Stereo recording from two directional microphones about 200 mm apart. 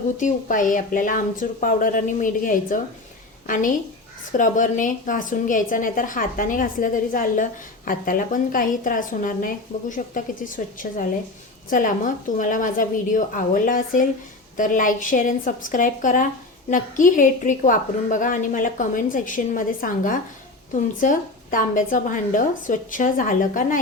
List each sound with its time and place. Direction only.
0.2 s a woman's voice: 40° left (ahead or behind)